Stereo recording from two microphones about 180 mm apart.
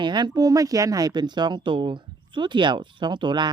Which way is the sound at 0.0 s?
25° right (ahead or behind).